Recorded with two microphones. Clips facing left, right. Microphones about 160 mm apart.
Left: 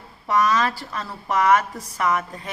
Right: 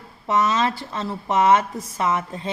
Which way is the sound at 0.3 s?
25° right (ahead or behind).